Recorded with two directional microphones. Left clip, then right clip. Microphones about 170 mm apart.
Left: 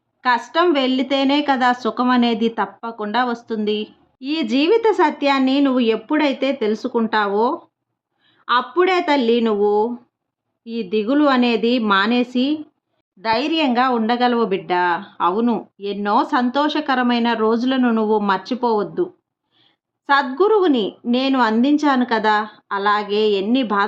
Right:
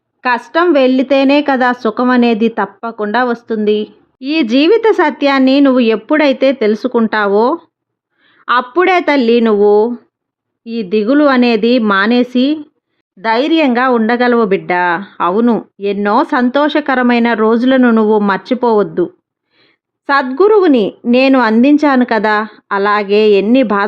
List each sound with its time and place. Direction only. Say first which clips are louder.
0.2 s a woman's voice: right 4 dB; 35° right (ahead or behind)